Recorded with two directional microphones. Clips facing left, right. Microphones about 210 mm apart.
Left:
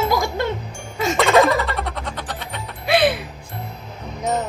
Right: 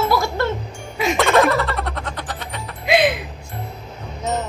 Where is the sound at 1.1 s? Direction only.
Centre (ahead or behind).